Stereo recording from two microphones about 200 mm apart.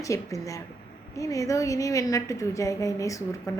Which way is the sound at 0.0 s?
15° left (ahead or behind).